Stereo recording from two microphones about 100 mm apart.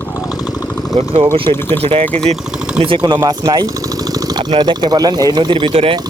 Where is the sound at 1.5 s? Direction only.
80° right.